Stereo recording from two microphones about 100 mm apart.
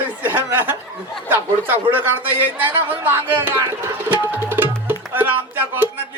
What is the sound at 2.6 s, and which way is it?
Speech, 20° right (ahead or behind).